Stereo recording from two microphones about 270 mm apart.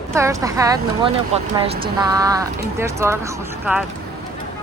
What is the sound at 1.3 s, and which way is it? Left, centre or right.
Speech, right.